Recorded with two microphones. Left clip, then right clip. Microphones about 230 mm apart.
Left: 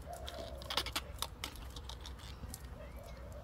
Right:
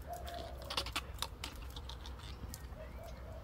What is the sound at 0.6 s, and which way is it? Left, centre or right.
Typing, left.